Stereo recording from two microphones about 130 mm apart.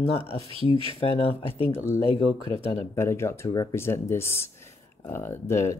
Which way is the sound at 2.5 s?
50° left (ahead or behind).